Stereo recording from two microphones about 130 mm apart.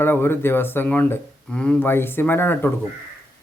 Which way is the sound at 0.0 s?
15° left (ahead or behind).